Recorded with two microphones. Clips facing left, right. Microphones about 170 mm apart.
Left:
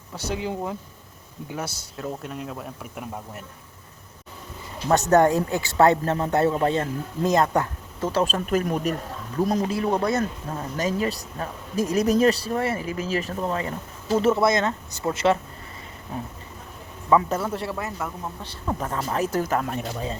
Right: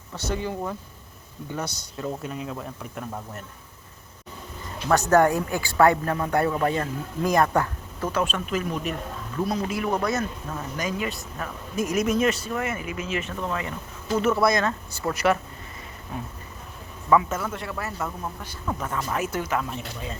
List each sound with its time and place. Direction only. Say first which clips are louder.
0.2 s speech: even; 10° left (ahead or behind)
4.9 s speech: left 1 dB; 20° left (ahead or behind); by 9.7 s 40° left (ahead or behind)
9.7 s speech: left 2 dB; 30° left (ahead or behind)
17.7 s speech: even; 15° left (ahead or behind)
18.8 s speech: left 2 dB; 35° left (ahead or behind); by 20.0 s 55° left (ahead or behind)